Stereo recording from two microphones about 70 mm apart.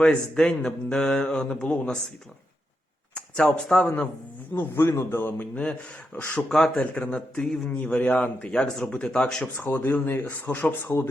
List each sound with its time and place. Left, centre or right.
0.0 s a man's voice: centre
3.2 s a sound: centre
3.7 s a man's voice: centre
4.5 s a man's voice: left
6.1 s a man's voice: centre
9.6 s speech: left